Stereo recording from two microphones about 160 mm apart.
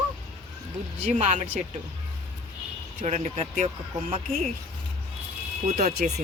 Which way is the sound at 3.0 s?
45° right (ahead or behind).